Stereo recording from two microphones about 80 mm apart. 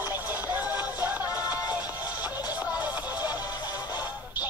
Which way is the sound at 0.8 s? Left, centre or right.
Left.